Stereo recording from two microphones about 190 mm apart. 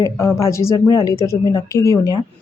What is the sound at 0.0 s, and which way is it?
Speech, 15° left (ahead or behind).